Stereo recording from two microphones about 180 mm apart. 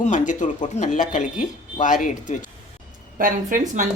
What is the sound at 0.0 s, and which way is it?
Speech, 40° left (ahead or behind).